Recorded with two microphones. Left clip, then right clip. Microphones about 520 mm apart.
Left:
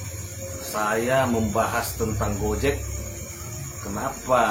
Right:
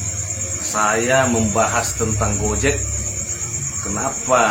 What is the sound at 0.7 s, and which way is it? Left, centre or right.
Speech, left.